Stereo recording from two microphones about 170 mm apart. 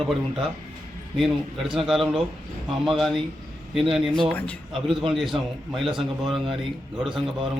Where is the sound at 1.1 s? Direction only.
Centre (ahead or behind).